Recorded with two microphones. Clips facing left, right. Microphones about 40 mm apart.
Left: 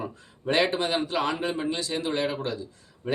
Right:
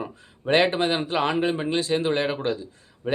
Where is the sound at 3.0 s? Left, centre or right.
Centre.